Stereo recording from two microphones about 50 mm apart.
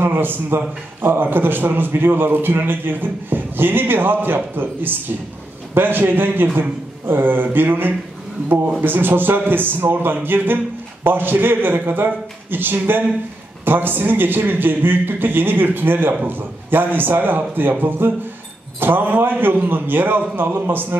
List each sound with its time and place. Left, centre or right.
0.0 s a man's voice: right
5.8 s a man's voice: right